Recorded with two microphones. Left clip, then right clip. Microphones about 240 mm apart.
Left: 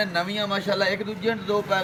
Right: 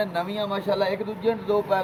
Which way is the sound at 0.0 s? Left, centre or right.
Left.